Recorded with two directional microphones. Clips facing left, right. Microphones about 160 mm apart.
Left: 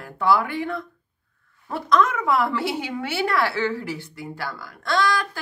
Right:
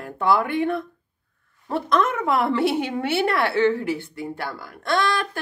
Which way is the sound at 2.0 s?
25° right (ahead or behind).